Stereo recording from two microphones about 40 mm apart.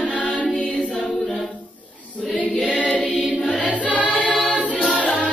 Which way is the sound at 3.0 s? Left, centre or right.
Centre.